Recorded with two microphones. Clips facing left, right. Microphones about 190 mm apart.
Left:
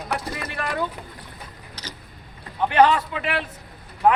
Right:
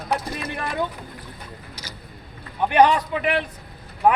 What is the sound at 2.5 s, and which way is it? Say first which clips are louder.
Speech: right 1 dB; 15° right (ahead or behind).